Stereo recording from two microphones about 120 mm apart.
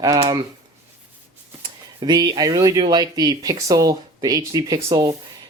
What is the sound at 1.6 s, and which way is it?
Speech, 40° right (ahead or behind).